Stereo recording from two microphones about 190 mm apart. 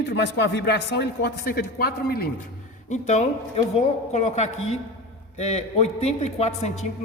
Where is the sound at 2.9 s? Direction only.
40° left (ahead or behind).